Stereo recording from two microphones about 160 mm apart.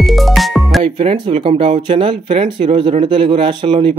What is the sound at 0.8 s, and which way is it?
Speech, 30° right (ahead or behind).